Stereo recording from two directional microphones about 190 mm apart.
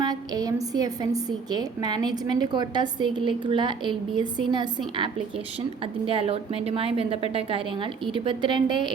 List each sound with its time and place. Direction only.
0.0 s a woman's voice: 20° right (ahead or behind)
6.1 s a woman's voice: 30° right (ahead or behind)